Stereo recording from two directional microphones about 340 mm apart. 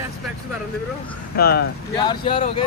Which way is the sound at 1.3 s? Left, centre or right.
Left.